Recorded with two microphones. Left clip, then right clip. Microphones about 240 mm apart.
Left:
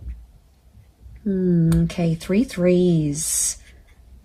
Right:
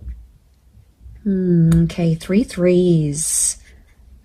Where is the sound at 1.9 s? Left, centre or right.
Right.